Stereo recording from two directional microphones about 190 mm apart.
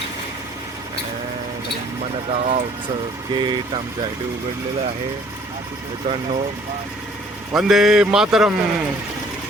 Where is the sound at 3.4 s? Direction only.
25° right (ahead or behind).